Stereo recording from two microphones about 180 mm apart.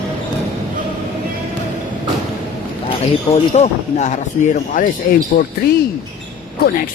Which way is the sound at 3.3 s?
40° left (ahead or behind).